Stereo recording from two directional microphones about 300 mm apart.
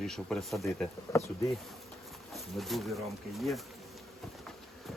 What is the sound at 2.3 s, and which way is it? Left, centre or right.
Speech, centre.